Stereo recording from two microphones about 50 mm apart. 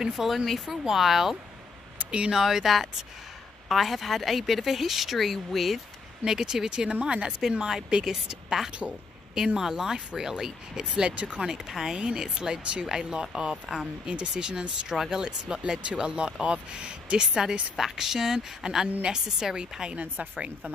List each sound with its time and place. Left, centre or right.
0.0 s speech: centre
2.0 s a sound: right
2.3 s a woman's voice: centre
6.2 s speech: centre
11.4 s speech: centre
17.7 s speech: centre
20.0 s speech: right